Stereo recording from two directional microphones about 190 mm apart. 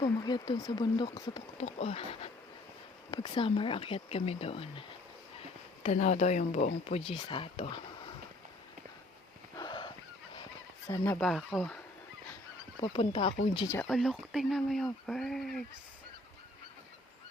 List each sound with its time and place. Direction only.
0.0 s speech: 20° left (ahead or behind)
1.5 s speech: 35° left (ahead or behind)
9.6 s a sound: 25° left (ahead or behind)
10.8 s speech: 15° left (ahead or behind)
11.2 s speech: centre (ahead or behind)
12.8 s speech: 30° left (ahead or behind)
13.8 s speech: centre (ahead or behind)